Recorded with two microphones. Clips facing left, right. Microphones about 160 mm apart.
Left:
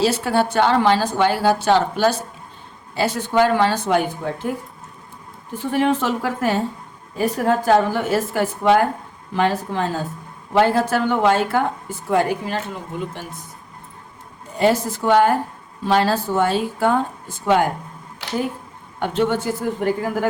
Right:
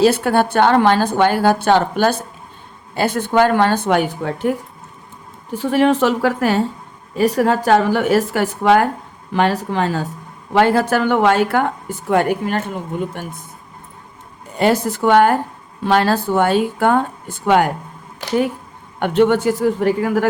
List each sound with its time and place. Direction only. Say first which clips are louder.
0.0 s a woman's voice: right 4 dB; 55° right (ahead or behind)
5.5 s a woman's voice: right 5 dB; 85° right
10.5 s speech: right 2 dB; 70° right (ahead or behind); by 13.2 s 55° right (ahead or behind)
14.6 s a woman's voice: right 2 dB; 65° right (ahead or behind)
18.9 s speech: right 6 dB; 65° right (ahead or behind)